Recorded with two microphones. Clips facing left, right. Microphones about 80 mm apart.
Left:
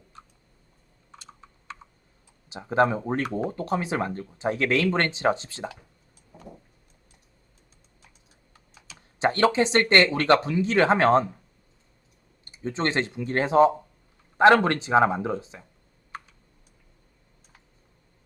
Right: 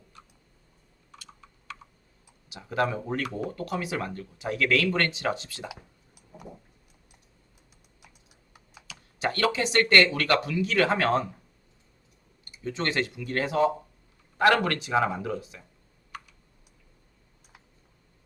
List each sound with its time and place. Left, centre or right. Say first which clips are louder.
1.1 s computer keyboard: left 2 dB; left
2.5 s speech: left 5 dB; left
8.9 s speech: left 5 dB; left
12.5 s speech: left 3 dB; left